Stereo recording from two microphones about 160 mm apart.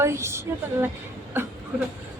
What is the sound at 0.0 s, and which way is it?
Speech, 15° right (ahead or behind).